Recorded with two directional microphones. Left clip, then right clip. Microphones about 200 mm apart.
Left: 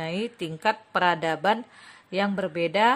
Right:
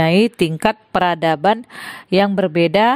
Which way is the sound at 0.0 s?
50° right (ahead or behind).